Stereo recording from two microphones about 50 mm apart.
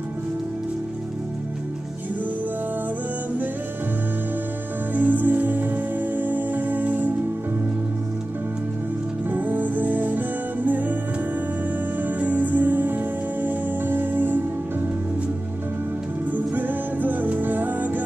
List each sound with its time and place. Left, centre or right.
4.9 s music: right
9.3 s music: right
12.0 s music: right
16.3 s music: right